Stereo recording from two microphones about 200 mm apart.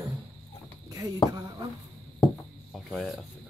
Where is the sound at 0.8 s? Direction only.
15° right (ahead or behind).